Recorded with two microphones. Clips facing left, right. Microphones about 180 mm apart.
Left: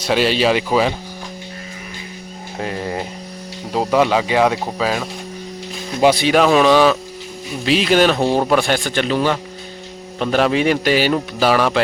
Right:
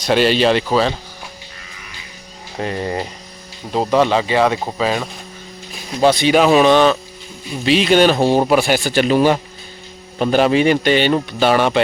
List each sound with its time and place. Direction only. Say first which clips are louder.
0.0 s a man's voice: right 2 dB; centre (ahead or behind)
2.6 s a man's voice: right 2 dB; centre (ahead or behind)
6.2 s a man's voice: right 4 dB; centre (ahead or behind)
10.2 s a man's voice: right 2 dB; centre (ahead or behind)